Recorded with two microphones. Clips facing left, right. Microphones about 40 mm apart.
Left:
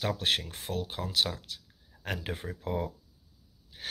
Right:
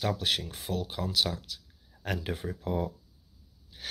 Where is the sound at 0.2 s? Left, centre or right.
Left.